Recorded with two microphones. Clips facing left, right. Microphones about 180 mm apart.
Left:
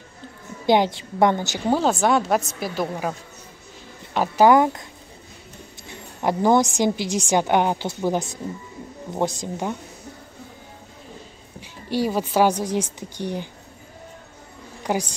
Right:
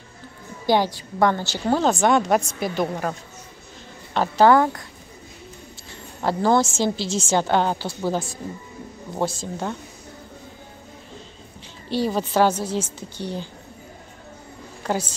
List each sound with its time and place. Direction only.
0.7 s a woman's voice: 20° left (ahead or behind)
5.9 s a woman's voice: 15° left (ahead or behind)
11.9 s a woman's voice: 10° left (ahead or behind)
14.8 s a woman's voice: 15° left (ahead or behind)